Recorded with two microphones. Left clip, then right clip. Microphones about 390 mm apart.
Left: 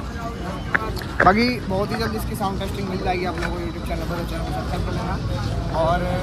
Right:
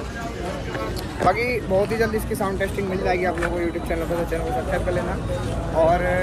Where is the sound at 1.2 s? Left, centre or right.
Left.